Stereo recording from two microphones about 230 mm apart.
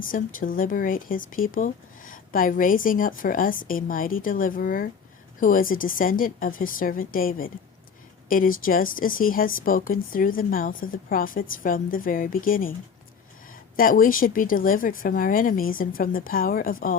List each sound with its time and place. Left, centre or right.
0.0 s speech: left